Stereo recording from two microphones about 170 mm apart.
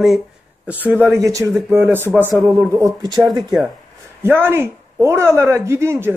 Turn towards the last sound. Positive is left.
turn(degrees=-15)  # may be behind; listen again after turning